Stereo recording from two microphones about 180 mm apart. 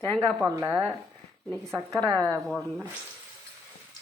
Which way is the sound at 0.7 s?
5° left (ahead or behind).